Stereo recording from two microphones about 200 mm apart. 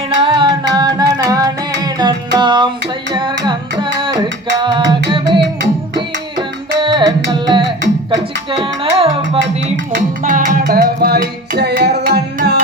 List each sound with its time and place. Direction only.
0.2 s music: 25° right (ahead or behind)
6.7 s music: 25° right (ahead or behind)
9.6 s music: 40° right (ahead or behind)